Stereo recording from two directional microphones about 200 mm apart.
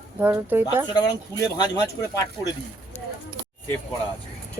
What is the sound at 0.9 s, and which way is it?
Speech, 20° left (ahead or behind).